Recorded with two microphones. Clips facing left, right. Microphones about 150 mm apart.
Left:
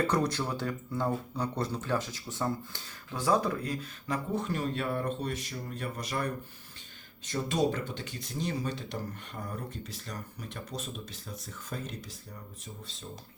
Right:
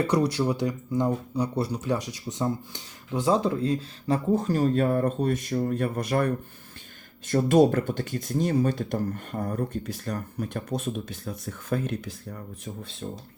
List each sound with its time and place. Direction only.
0.1 s speech: 10° right (ahead or behind); by 13.1 s 60° right (ahead or behind)